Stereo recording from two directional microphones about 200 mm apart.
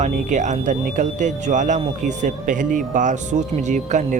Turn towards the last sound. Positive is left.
turn(degrees=-35)  # may be behind; listen again after turning